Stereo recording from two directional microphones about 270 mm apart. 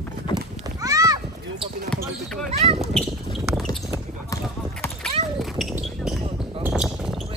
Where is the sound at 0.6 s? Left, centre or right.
Centre.